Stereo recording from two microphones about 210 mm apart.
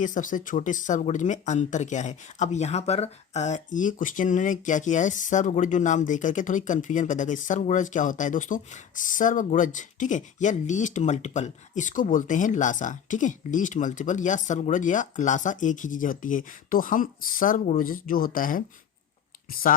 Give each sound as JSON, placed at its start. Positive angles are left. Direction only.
{"t": 0.0, "sound": "speech", "side_deg": 40}